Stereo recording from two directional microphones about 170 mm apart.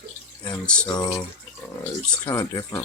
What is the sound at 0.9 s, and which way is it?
Speech, 25° left (ahead or behind).